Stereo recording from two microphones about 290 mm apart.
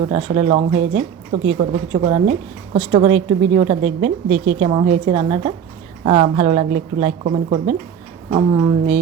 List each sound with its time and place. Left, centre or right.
0.1 s a woman's voice: centre